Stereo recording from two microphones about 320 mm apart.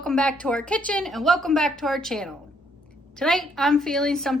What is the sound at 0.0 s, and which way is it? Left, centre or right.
A woman's voice, centre.